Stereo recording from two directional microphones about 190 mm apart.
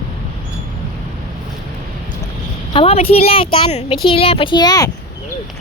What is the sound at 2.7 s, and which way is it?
Speech, 30° left (ahead or behind).